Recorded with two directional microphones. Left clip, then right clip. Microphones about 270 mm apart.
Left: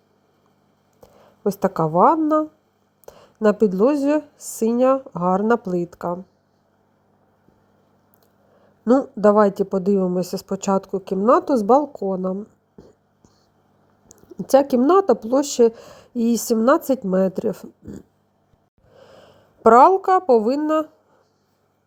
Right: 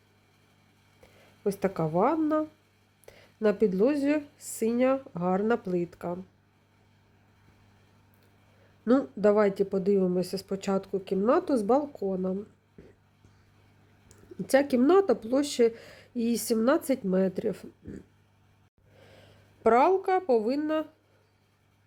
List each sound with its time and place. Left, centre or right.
1.0 s a woman's voice: centre
9.2 s a woman's voice: centre
14.4 s a woman's voice: centre
19.0 s a sound: left